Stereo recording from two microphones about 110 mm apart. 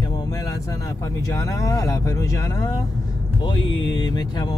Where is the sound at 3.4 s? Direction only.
50° left (ahead or behind).